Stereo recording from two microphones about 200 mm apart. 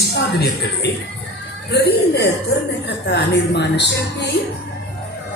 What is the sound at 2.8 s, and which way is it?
A woman's voice, 55° left (ahead or behind).